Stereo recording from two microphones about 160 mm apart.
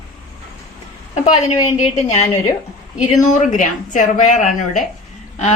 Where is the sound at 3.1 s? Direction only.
55° left (ahead or behind).